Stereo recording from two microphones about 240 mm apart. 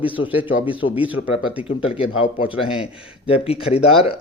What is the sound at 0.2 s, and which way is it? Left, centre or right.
Speech, left.